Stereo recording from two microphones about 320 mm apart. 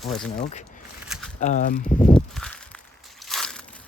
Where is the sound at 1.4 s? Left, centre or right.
Left.